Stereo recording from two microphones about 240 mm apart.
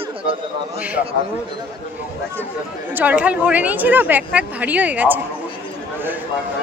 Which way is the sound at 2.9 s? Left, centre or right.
Centre.